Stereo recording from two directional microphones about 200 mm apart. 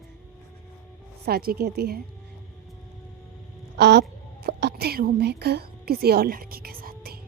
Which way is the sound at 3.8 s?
60° right (ahead or behind).